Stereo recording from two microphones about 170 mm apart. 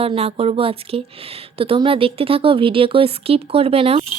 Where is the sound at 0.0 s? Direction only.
35° right (ahead or behind).